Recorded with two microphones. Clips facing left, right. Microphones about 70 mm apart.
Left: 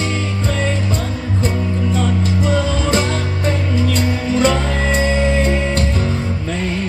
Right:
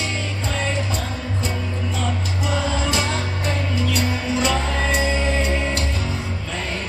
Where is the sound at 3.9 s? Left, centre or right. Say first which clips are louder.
Left 4 dB; left.